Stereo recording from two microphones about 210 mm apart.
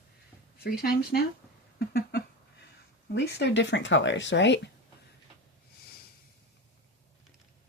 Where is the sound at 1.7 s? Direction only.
50° left (ahead or behind).